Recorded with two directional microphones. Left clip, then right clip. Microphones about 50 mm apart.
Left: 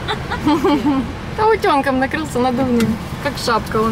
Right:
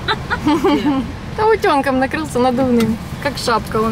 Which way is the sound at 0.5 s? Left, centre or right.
Centre.